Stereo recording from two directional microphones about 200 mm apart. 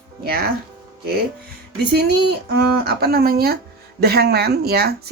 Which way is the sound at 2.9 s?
50° right (ahead or behind).